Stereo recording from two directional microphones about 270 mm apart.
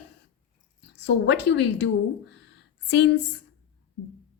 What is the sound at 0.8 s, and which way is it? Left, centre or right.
A woman's voice, left.